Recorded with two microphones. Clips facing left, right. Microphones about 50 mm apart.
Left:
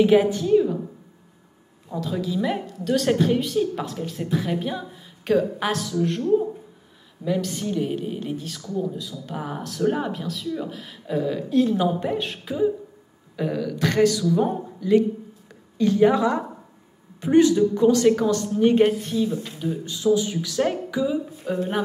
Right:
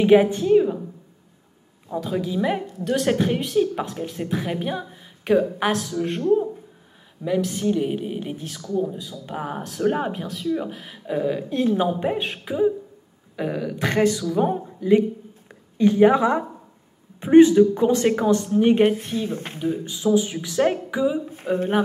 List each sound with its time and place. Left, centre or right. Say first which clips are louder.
0.0 s a woman's voice: right 2 dB; centre
2.0 s a woman's voice: right 1 dB; centre
7.2 s a woman's voice: right 3 dB; centre
19.1 s speech: left 2 dB; right
19.6 s a woman's voice: right 1 dB; right
21.3 s speech: right 3 dB; right